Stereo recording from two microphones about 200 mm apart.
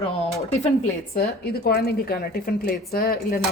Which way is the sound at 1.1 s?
50° left (ahead or behind).